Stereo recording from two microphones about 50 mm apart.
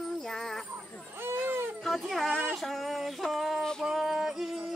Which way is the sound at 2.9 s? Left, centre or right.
Centre.